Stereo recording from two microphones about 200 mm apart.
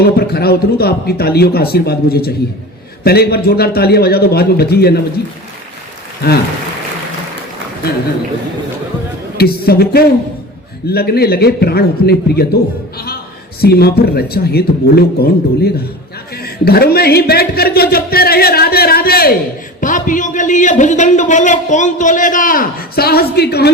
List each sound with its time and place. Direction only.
0.0 s speech: 50° left (ahead or behind)
6.2 s speech: 50° left (ahead or behind)
9.4 s speech: 50° left (ahead or behind)
13.6 s a man's voice: 50° left (ahead or behind)